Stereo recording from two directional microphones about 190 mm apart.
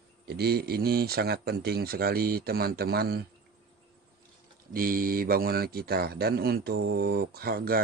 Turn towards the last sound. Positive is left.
turn(degrees=-55)  # may be behind; listen again after turning